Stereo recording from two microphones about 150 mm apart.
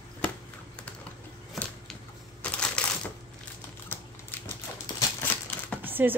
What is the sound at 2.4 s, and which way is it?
Typing, 5° left (ahead or behind).